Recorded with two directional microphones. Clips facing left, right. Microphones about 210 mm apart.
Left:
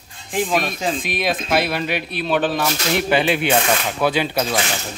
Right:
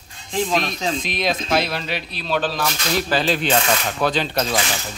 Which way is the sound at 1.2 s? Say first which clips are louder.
Even; 5° left (ahead or behind).